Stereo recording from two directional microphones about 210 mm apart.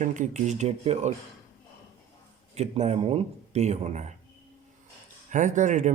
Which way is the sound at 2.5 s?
30° right (ahead or behind).